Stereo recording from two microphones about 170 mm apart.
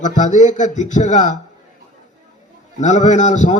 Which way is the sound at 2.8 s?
45° left (ahead or behind).